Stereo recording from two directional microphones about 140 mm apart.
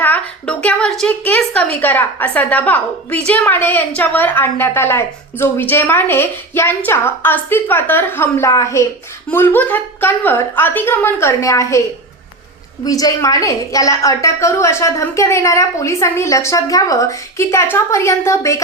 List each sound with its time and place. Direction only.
0.0 s a sound: 10° left (ahead or behind)
1.2 s a woman's voice: 10° left (ahead or behind)
12.8 s a woman's voice: 25° left (ahead or behind)